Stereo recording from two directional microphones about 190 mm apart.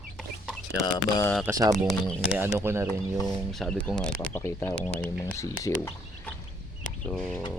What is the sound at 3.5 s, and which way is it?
Speech, 5° left (ahead or behind).